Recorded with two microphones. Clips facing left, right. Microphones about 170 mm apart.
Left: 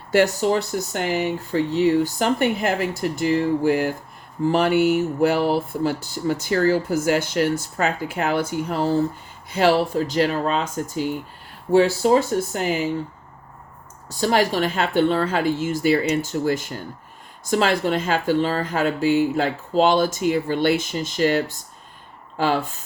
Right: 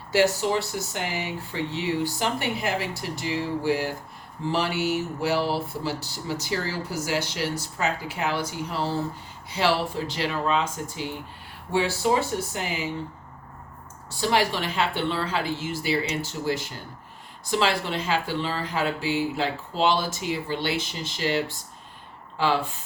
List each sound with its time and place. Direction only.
0.1 s speech: 50° left (ahead or behind)
14.1 s speech: 45° left (ahead or behind)